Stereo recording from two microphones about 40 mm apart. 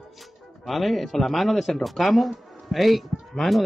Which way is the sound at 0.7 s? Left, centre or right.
Centre.